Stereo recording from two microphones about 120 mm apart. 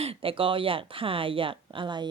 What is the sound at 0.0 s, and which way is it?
Speech, 50° right (ahead or behind).